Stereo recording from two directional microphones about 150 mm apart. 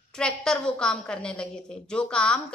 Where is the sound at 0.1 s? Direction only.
5° left (ahead or behind).